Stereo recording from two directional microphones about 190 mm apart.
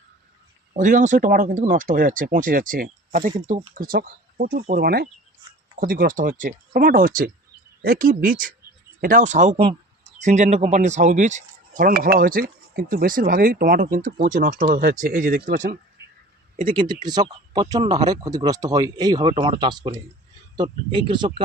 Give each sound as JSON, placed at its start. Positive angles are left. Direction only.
{"t": 0.8, "sound": "speech", "side_deg": -40}
{"t": 16.6, "sound": "speech", "side_deg": -25}